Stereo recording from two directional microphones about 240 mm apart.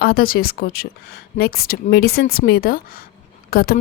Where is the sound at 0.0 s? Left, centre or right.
Left.